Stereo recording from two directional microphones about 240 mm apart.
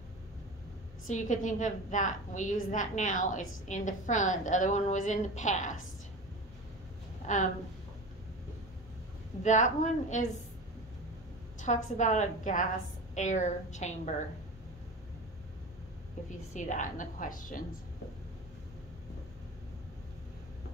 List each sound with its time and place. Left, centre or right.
1.0 s a woman's voice: left
7.3 s a woman's voice: left
9.4 s a woman's voice: left
11.6 s a woman's voice: left
16.5 s a woman's voice: left